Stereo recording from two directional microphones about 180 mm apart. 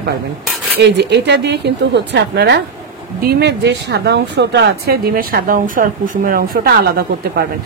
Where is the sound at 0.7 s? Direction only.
70° right (ahead or behind).